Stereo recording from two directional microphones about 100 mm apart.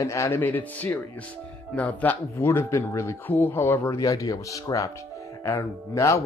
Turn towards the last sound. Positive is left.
turn(degrees=35)  # may be behind; listen again after turning